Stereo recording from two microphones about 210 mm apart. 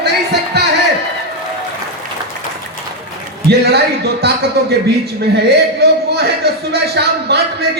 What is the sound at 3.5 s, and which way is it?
Speech, 50° right (ahead or behind).